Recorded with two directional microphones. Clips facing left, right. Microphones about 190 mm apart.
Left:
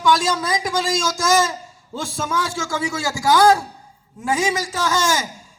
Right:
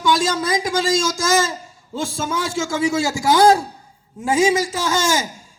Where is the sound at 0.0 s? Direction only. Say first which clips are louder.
Even; 25° right (ahead or behind).